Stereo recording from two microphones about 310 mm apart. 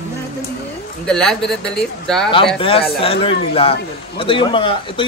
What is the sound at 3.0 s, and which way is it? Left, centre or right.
Speech, centre.